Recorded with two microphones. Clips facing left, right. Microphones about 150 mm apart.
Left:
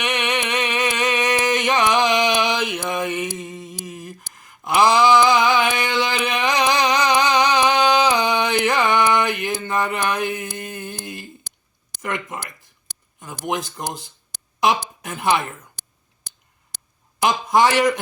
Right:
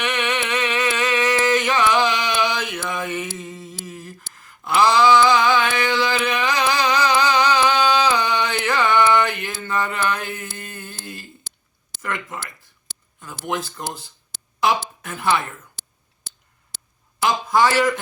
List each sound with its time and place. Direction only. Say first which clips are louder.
0.0 s a sound: even; 15° left (ahead or behind)
13.1 s speech: left 1 dB; 15° left (ahead or behind)
17.2 s a man's voice: left 1 dB; 15° left (ahead or behind)